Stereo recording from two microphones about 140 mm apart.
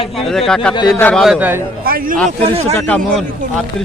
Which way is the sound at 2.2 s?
45° right (ahead or behind).